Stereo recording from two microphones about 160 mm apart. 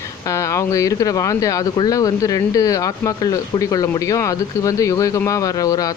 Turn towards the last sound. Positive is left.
turn(degrees=20)  # may be behind; listen again after turning